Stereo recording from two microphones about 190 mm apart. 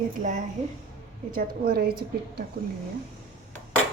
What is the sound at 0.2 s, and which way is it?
A woman's voice, 40° right (ahead or behind).